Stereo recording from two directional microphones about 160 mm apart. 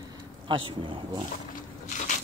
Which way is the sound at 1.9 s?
50° left (ahead or behind).